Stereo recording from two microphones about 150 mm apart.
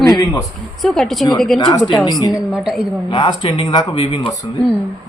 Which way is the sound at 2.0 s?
25° left (ahead or behind).